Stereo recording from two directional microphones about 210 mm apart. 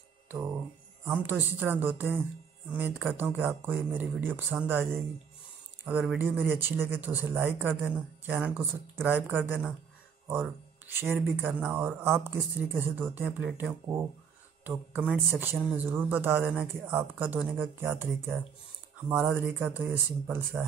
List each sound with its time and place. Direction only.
0.3 s a sound: 20° right (ahead or behind)
1.0 s speech: 5° right (ahead or behind)
5.9 s speech: 5° right (ahead or behind)
10.9 s speech: 10° right (ahead or behind)